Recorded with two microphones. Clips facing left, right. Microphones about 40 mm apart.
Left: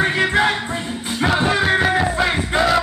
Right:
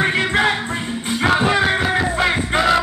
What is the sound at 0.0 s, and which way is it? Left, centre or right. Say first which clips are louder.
Music: even; centre.